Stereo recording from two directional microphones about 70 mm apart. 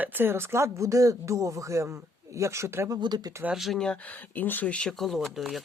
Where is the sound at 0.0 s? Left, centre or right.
Right.